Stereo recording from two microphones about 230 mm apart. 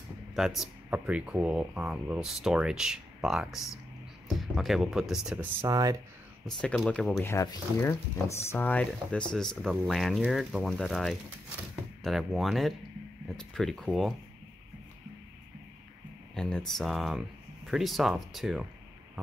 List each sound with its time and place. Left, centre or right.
0.4 s speech: centre
6.4 s speech: centre
16.3 s speech: centre